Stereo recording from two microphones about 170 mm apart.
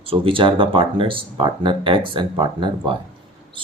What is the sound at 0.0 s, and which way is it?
Speech, 30° right (ahead or behind).